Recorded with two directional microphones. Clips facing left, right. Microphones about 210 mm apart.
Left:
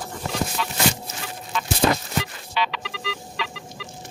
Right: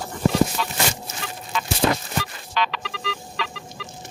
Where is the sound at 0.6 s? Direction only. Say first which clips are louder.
Right 1 dB; 40° right (ahead or behind).